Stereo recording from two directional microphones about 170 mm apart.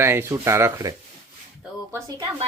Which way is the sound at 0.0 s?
15° right (ahead or behind).